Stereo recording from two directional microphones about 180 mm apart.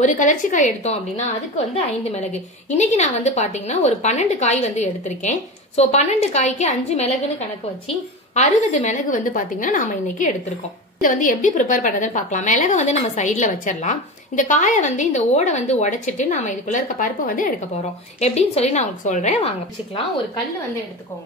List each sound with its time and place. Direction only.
0.0 s a woman's voice: 45° left (ahead or behind)
2.8 s a woman's voice: 40° left (ahead or behind)
8.4 s a woman's voice: 40° left (ahead or behind)
18.2 s a woman's voice: 35° left (ahead or behind)